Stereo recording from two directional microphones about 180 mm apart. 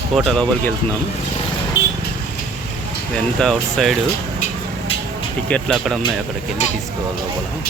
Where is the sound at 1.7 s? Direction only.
15° left (ahead or behind).